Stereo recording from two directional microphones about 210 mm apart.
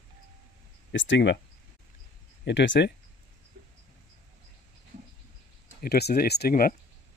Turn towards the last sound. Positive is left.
turn(degrees=45)  # may be behind; listen again after turning